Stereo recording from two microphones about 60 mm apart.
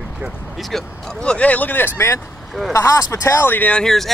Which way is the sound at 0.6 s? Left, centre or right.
Centre.